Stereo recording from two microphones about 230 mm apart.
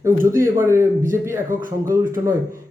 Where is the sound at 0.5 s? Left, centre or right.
Centre.